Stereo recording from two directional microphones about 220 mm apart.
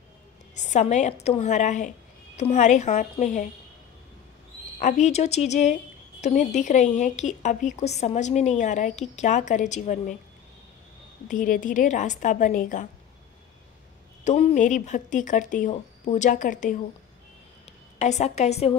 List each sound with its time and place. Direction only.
0.6 s a woman's voice: 30° left (ahead or behind)
4.7 s a woman's voice: 35° left (ahead or behind)
11.2 s a woman's voice: 40° left (ahead or behind)
14.2 s a woman's voice: 30° left (ahead or behind)